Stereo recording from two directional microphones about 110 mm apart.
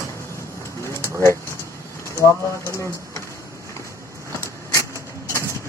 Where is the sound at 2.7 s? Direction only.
25° left (ahead or behind).